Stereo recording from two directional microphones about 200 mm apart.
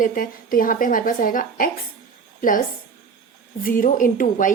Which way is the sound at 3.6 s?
45° left (ahead or behind).